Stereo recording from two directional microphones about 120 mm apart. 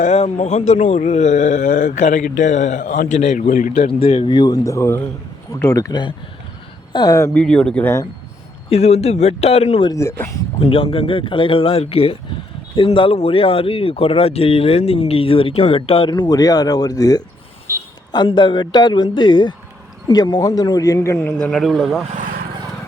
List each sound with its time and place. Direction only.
0.0 s speech: 80° left
3.2 s speech: 70° left (ahead or behind); by 3.7 s 90° left
3.8 s a man's voice: 50° left (ahead or behind); by 7.3 s 30° left (ahead or behind)
7.3 s speech: 5° left (ahead or behind)
8.7 s speech: 60° left (ahead or behind)
9.9 s speech: 25° left (ahead or behind)
10.6 s speech: 55° left (ahead or behind); by 17.2 s 30° left (ahead or behind)
17.7 s a sound: 25° right (ahead or behind)
18.1 s a man's voice: 40° left (ahead or behind); by 21.2 s 25° left (ahead or behind)
21.2 s speech: 5° left (ahead or behind)